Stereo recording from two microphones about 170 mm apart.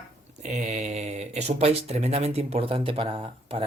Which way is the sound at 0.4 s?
45° right (ahead or behind).